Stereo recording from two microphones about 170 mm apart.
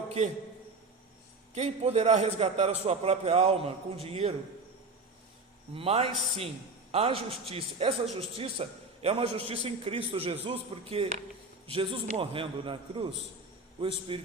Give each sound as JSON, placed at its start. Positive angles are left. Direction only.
{"t": 1.5, "sound": "a man's voice", "side_deg": -40}
{"t": 5.7, "sound": "a man's voice", "side_deg": -35}